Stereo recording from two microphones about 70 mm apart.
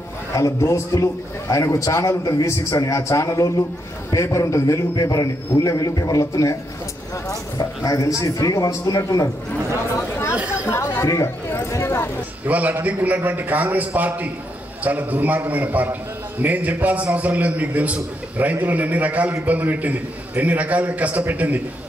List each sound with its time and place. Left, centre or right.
0.3 s a man's voice: left
10.7 s chatter: left
11.5 s vehicle: left
12.4 s a man's voice: right